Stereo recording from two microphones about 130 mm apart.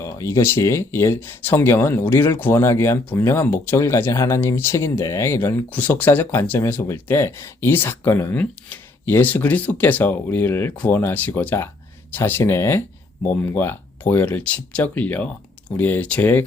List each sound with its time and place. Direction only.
0.0 s speech: 20° left (ahead or behind)